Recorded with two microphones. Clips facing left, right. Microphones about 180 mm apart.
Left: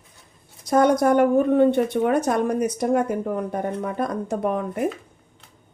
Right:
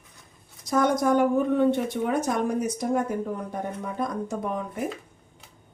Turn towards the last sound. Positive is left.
turn(degrees=60)  # may be behind; listen again after turning